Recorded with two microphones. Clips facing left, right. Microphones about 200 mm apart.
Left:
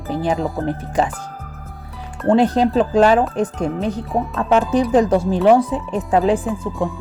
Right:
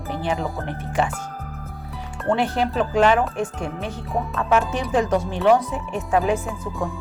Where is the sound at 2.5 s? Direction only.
30° left (ahead or behind).